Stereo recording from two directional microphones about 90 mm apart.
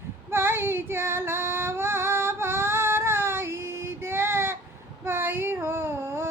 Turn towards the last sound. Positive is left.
turn(degrees=-30)  # may be behind; listen again after turning